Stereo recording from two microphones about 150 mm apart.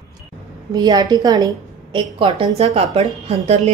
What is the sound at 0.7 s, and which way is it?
A woman's voice, 25° right (ahead or behind).